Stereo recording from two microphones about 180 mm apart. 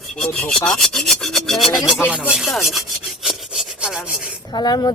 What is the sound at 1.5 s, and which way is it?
Speech, centre (ahead or behind).